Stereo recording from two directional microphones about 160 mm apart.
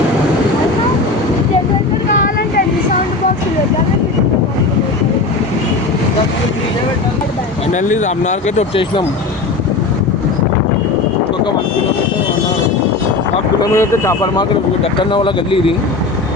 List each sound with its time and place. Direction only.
7.7 s speech: 50° left (ahead or behind)
13.6 s speech: 15° left (ahead or behind)
14.9 s speech: 30° left (ahead or behind)